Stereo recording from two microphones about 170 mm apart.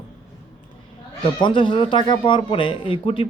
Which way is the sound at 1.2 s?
30° left (ahead or behind).